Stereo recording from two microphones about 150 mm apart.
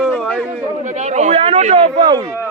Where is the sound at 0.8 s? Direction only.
50° right (ahead or behind).